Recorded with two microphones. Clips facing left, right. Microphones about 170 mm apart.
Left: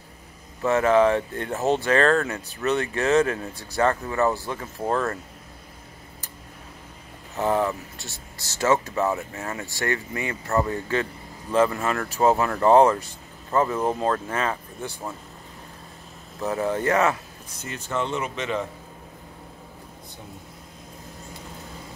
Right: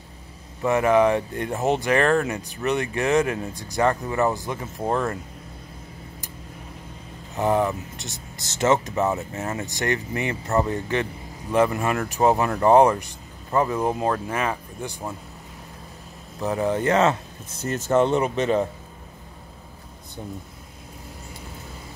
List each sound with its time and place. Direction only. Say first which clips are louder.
0.6 s speech: even; 15° right (ahead or behind)
7.3 s speech: right 2 dB; 15° right (ahead or behind)
16.3 s speech: right 2 dB; 15° right (ahead or behind)
17.6 s speech: right 8 dB; 45° right (ahead or behind)